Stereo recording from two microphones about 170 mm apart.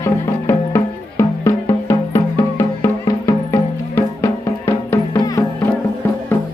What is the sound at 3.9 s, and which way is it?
Music, 15° left (ahead or behind).